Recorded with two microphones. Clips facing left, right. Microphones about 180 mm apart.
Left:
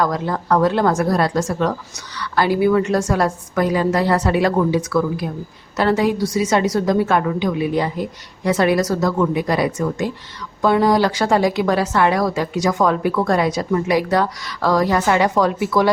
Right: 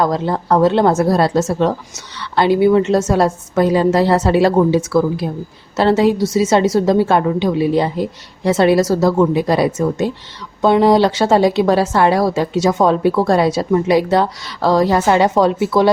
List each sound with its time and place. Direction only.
0.0 s a woman's voice: 25° right (ahead or behind)